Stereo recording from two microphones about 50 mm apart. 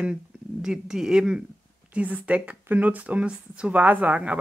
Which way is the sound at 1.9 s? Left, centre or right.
Right.